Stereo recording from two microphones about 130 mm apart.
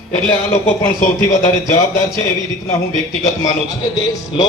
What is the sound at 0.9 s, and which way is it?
Speech, 65° left (ahead or behind).